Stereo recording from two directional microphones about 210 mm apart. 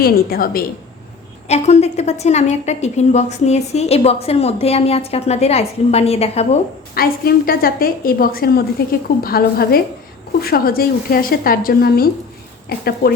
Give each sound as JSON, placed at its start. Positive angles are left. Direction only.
{"t": 0.0, "sound": "a woman's voice", "side_deg": 45}
{"t": 1.5, "sound": "a woman's voice", "side_deg": 30}
{"t": 6.9, "sound": "a woman's voice", "side_deg": 45}